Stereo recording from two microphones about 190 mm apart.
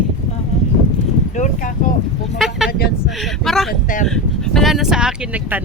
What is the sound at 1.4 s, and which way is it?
Speech, 40° left (ahead or behind).